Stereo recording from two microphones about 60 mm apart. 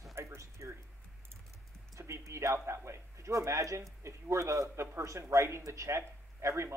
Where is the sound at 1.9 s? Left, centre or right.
Right.